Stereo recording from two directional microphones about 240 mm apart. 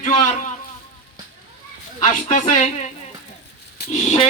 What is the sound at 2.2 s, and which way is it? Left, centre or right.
Speech, left.